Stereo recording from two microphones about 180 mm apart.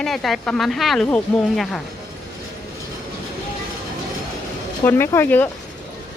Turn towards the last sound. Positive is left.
turn(degrees=10)  # may be behind; listen again after turning